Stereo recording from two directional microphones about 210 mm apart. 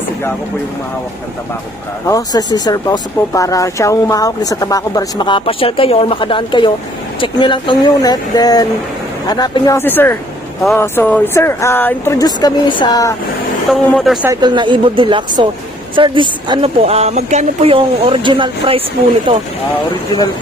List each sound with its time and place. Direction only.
2.0 s speech: 15° left (ahead or behind)
13.7 s speech: centre (ahead or behind)
14.3 s a woman's voice: 20° right (ahead or behind)